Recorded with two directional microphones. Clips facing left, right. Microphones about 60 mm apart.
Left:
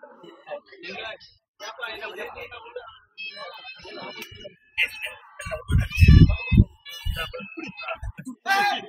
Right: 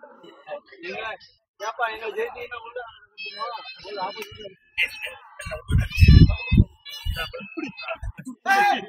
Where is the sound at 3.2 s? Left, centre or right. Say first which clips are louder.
Right 6 dB; centre.